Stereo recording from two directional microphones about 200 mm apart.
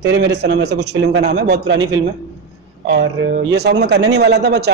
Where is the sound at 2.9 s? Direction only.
55° right (ahead or behind).